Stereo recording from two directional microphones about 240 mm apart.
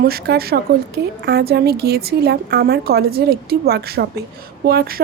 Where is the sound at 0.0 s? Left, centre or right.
Right.